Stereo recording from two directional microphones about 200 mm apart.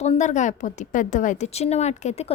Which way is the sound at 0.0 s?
35° left (ahead or behind).